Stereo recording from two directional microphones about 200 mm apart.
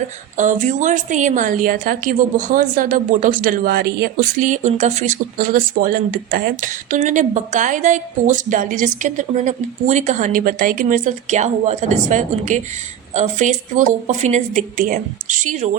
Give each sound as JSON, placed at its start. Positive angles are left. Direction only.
{"t": 0.3, "sound": "a woman's voice", "side_deg": -40}